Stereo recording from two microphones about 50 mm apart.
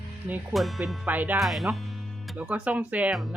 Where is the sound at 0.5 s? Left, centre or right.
Centre.